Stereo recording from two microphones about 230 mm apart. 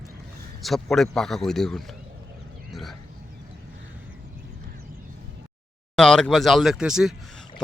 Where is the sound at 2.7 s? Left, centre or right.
Centre.